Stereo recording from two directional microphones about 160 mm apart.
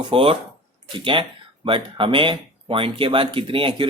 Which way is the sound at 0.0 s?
35° right (ahead or behind).